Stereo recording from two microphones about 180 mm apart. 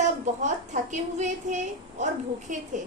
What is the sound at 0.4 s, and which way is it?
A woman's voice, 40° right (ahead or behind).